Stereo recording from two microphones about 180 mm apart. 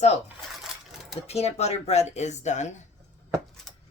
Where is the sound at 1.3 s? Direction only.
35° left (ahead or behind).